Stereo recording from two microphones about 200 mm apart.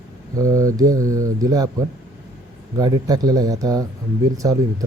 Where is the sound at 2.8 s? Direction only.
20° right (ahead or behind).